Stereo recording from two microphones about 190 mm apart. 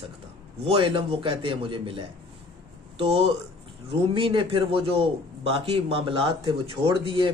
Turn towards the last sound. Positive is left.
turn(degrees=-25)  # may be behind; listen again after turning